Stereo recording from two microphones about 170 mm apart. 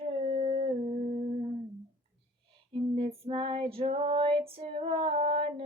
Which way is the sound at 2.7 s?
35° right (ahead or behind).